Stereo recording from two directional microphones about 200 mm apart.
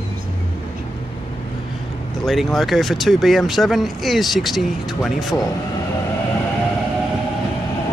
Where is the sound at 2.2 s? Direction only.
Centre (ahead or behind).